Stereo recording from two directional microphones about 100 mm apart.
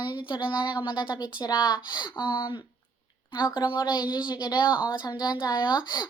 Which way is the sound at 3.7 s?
45° left (ahead or behind).